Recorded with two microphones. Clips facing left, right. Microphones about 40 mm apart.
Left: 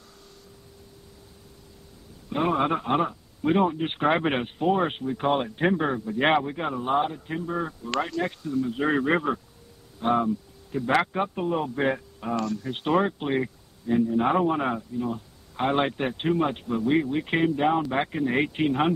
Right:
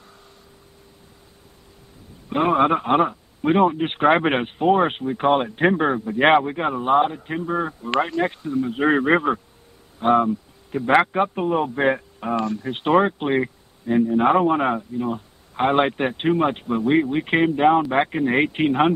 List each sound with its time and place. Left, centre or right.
2.2 s speech: right